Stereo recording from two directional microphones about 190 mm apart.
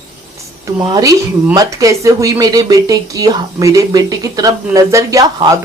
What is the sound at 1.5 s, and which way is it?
Speech, 15° right (ahead or behind).